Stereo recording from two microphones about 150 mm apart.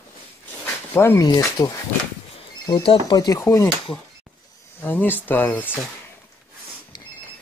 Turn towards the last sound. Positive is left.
turn(degrees=10)  # may be behind; listen again after turning